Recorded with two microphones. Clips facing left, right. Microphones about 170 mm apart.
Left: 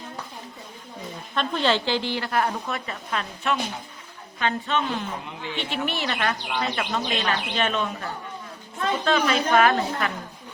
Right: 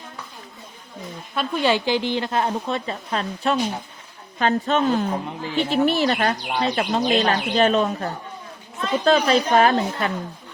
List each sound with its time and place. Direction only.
1.4 s a woman's voice: 10° right (ahead or behind); by 10.1 s 30° right (ahead or behind)